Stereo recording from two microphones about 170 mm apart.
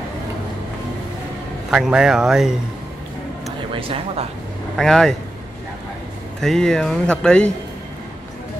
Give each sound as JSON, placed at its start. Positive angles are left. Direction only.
{"t": 1.7, "sound": "speech", "side_deg": -5}
{"t": 3.7, "sound": "speech", "side_deg": -35}
{"t": 4.7, "sound": "speech", "side_deg": 5}
{"t": 6.4, "sound": "speech", "side_deg": 5}